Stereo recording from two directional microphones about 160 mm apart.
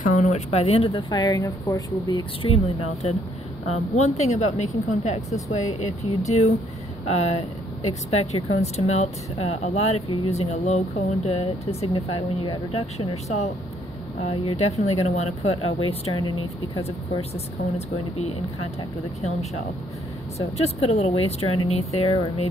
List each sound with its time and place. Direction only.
0.0 s speech: 50° left (ahead or behind); by 2.2 s 20° left (ahead or behind)
2.4 s speech: 35° left (ahead or behind)
14.2 s speech: 30° left (ahead or behind)
16.8 s speech: 40° left (ahead or behind)
20.3 s speech: 40° left (ahead or behind)